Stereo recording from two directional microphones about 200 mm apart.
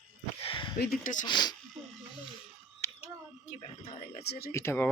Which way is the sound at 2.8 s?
10° left (ahead or behind).